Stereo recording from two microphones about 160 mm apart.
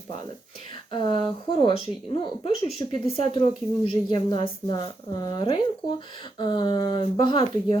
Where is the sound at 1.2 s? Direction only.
30° left (ahead or behind).